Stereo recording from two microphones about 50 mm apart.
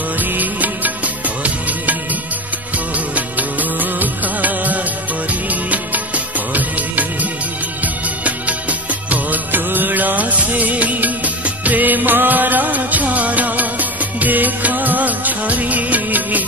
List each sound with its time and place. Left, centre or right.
0.2 s music: right
3.2 s music of bollywood: right
7.8 s music: right